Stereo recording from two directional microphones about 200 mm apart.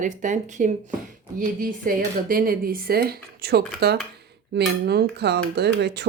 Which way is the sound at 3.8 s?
55° right (ahead or behind).